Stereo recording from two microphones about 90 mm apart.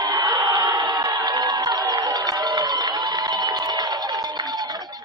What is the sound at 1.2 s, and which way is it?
Cowbell, 50° right (ahead or behind).